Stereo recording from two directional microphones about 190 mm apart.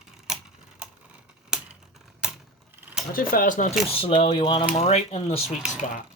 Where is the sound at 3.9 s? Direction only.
30° left (ahead or behind).